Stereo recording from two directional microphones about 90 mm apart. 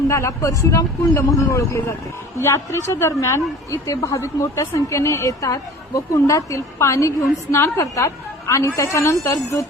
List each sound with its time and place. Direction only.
0.1 s a woman's voice: 35° left (ahead or behind)